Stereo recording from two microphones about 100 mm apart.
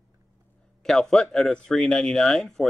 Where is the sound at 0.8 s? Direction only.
5° left (ahead or behind).